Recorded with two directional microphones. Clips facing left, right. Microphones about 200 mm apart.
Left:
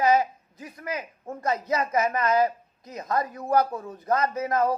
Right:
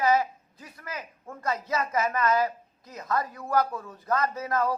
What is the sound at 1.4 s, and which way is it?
A man's voice, 20° left (ahead or behind).